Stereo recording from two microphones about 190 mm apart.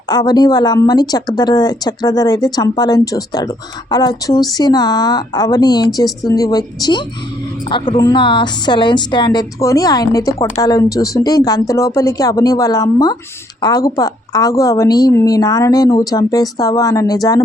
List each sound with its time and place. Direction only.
0.1 s speech: 20° left (ahead or behind)